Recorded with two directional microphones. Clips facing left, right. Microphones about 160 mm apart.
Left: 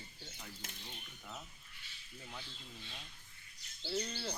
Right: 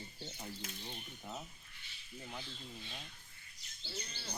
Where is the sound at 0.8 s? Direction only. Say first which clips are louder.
Right 4 dB; 20° right (ahead or behind).